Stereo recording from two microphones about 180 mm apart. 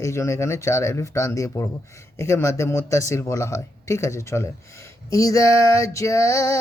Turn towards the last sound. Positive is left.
turn(degrees=15)  # may be behind; listen again after turning